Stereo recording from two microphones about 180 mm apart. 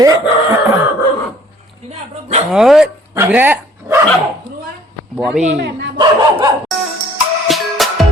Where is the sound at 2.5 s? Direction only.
Centre (ahead or behind).